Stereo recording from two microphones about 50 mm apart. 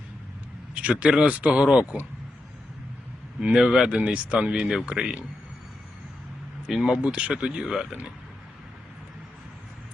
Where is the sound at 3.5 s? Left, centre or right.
Centre.